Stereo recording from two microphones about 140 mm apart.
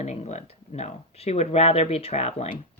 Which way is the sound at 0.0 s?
55° left (ahead or behind).